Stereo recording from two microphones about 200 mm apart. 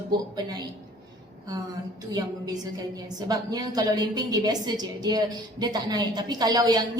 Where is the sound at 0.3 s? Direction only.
20° right (ahead or behind).